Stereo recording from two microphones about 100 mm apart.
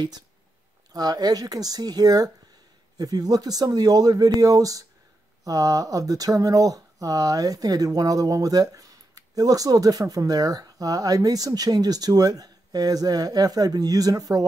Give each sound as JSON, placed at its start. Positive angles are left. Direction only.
{"t": 0.9, "sound": "speech", "side_deg": -40}